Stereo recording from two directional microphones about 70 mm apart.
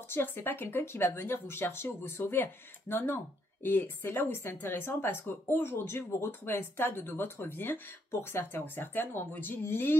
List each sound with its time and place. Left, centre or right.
0.1 s speech: left